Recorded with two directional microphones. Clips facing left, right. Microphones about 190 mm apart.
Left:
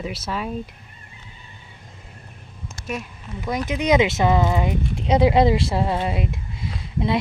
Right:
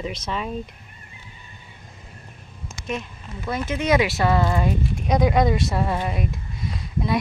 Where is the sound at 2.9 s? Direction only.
10° left (ahead or behind).